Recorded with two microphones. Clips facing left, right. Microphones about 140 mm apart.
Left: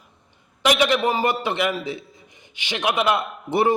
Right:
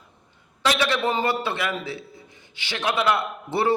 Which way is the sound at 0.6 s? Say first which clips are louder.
Left 3 dB; 15° left (ahead or behind).